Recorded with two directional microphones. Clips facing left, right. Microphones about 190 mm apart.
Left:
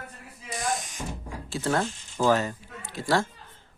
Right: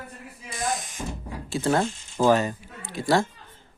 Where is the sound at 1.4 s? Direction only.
15° right (ahead or behind).